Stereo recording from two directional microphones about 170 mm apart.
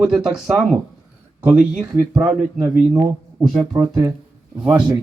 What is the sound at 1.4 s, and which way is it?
Speech, 10° right (ahead or behind).